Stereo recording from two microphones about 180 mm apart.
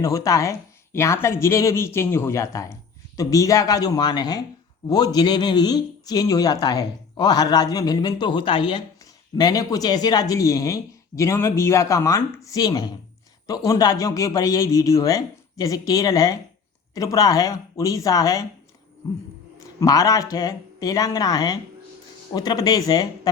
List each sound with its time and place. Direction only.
0.0 s speech: 15° left (ahead or behind)
19.5 s speech: 20° left (ahead or behind)